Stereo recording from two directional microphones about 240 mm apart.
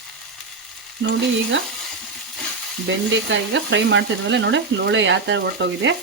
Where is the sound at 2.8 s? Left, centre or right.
Right.